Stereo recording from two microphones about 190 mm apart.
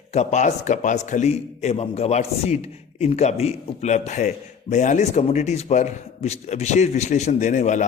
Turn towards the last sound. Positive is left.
turn(degrees=40)  # may be behind; listen again after turning